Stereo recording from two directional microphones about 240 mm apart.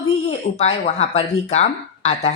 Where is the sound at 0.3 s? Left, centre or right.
Left.